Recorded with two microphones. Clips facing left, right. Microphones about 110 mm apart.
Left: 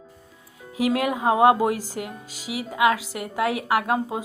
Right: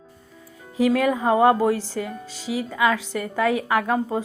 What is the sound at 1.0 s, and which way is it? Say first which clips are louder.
Speech: left 1 dB; 10° left (ahead or behind).